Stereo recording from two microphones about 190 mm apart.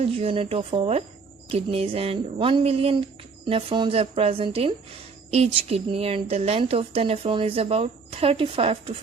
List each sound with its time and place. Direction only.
0.0 s a woman's voice: 30° right (ahead or behind)